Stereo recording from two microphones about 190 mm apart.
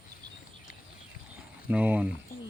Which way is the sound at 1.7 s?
10° right (ahead or behind).